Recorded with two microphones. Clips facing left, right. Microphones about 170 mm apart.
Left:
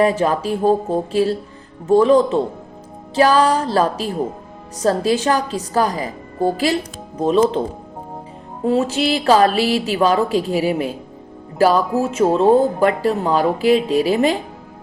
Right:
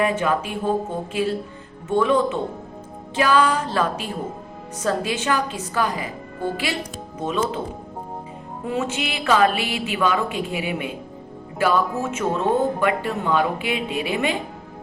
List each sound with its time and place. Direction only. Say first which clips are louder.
0.0 s speech: left 5 dB; 35° left (ahead or behind)
8.6 s speech: left 8 dB; 35° left (ahead or behind)